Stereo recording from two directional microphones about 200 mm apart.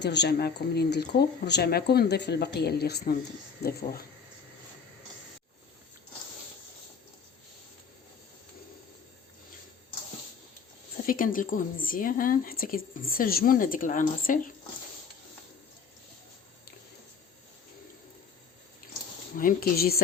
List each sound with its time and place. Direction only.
0.0 s speech: 60° left (ahead or behind)
11.0 s speech: 45° left (ahead or behind)
19.4 s speech: 45° left (ahead or behind)